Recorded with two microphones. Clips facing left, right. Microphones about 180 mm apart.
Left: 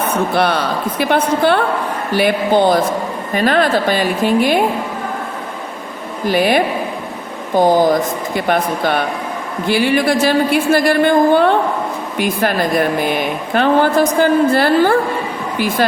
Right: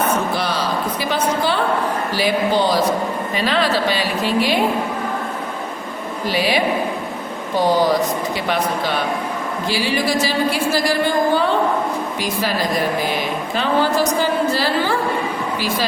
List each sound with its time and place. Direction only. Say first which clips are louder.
0.3 s a woman's voice: left 5 dB; 60° left (ahead or behind)
6.2 s a woman's voice: left 5 dB; 50° left (ahead or behind)